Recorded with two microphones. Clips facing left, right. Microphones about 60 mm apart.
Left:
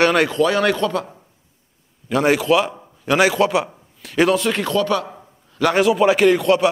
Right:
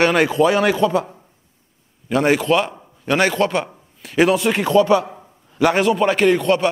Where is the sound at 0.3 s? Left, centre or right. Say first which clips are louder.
Right 2 dB; centre.